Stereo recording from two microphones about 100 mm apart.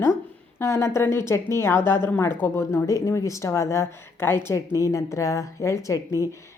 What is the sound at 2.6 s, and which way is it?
Speech, 30° left (ahead or behind).